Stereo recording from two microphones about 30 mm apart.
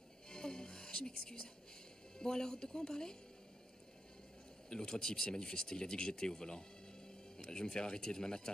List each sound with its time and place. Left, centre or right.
0.3 s music: left
2.1 s speech: left
4.6 s speech: left